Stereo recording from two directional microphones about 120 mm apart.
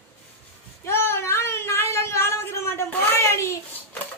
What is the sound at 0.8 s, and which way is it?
Child singing, 20° left (ahead or behind).